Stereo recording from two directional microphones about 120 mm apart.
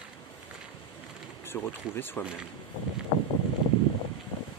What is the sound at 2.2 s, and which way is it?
Speech, 5° right (ahead or behind).